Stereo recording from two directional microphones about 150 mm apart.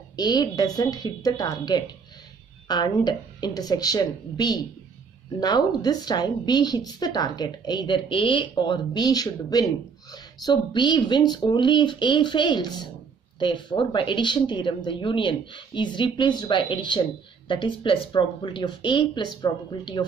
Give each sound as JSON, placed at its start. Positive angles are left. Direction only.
{"t": 0.1, "sound": "a woman's voice", "side_deg": 30}